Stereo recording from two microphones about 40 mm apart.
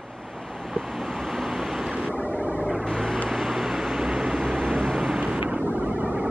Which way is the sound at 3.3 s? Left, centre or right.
Centre.